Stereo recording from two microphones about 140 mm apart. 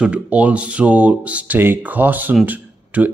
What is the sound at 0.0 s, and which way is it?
Speech, 10° right (ahead or behind).